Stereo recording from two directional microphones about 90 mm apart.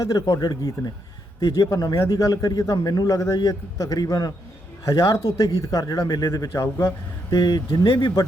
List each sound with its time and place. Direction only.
0.0 s a man's voice: 45° left (ahead or behind)
7.3 s a man's voice: 50° left (ahead or behind)